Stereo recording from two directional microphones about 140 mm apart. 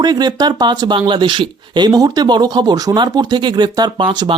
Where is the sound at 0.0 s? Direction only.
30° right (ahead or behind).